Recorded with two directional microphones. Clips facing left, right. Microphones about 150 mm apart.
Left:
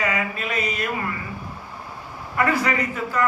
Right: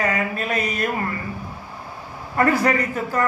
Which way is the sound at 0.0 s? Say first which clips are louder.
Right 2 dB; 40° right (ahead or behind).